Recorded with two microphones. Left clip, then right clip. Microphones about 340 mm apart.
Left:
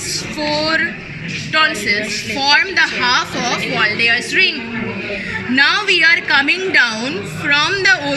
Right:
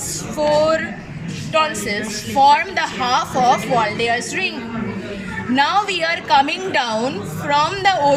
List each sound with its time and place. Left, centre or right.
0.6 s a sound: right
1.5 s a woman's voice: right
5.5 s a woman's voice: right